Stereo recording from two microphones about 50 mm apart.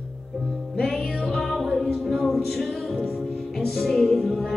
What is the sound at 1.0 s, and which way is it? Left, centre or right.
A capella, centre.